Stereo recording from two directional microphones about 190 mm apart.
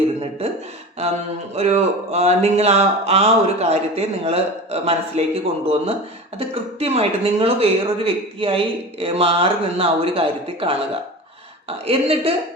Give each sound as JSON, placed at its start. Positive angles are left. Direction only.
{"t": 1.0, "sound": "speech", "side_deg": -35}
{"t": 11.9, "sound": "speech", "side_deg": -30}